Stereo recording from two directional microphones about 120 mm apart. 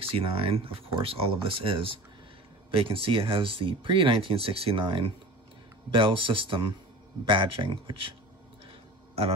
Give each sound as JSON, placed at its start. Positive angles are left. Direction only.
{"t": 0.1, "sound": "speech", "side_deg": -50}